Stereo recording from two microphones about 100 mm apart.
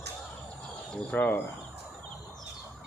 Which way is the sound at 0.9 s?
15° left (ahead or behind).